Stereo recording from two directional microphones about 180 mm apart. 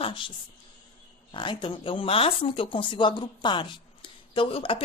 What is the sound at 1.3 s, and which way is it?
Speech, 25° left (ahead or behind).